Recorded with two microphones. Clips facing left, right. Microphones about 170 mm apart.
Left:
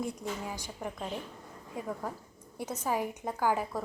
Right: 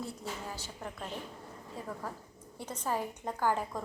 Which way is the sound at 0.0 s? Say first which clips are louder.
Left 4 dB; 15° left (ahead or behind).